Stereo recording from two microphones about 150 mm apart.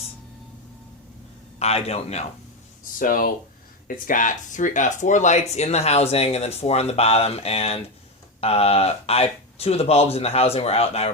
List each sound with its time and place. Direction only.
1.5 s speech: 45° left (ahead or behind)
3.0 s speech: 70° left (ahead or behind); by 11.1 s 40° left (ahead or behind)